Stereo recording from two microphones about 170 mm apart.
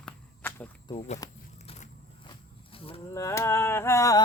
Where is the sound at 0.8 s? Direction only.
35° left (ahead or behind).